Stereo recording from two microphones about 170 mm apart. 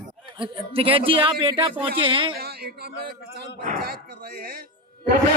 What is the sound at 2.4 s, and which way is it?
Speech, 65° right (ahead or behind).